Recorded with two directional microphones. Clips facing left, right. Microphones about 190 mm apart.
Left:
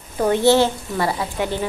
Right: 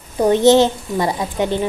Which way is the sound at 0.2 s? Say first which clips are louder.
Right 4 dB; 20° right (ahead or behind).